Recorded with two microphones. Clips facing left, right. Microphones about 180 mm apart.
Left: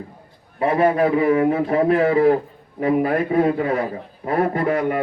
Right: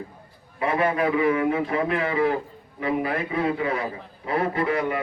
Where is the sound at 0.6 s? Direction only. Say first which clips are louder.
Left 6 dB; 40° left (ahead or behind).